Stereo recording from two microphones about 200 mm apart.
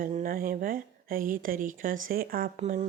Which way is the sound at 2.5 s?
35° right (ahead or behind).